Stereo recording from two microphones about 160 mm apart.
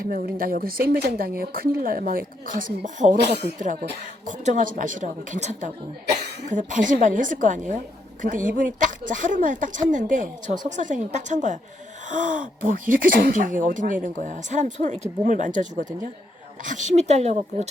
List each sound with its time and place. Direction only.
0.0 s speech: 65° right (ahead or behind)
4.3 s a woman's voice: 50° right (ahead or behind)